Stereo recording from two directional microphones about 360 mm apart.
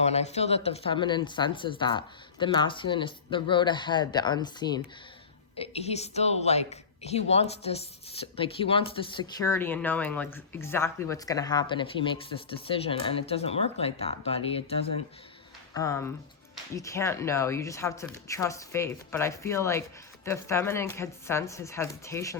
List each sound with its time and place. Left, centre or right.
0.0 s a woman's voice: centre